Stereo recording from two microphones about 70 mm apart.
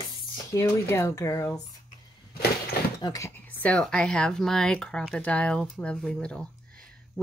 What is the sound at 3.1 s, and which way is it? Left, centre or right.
Speech, left.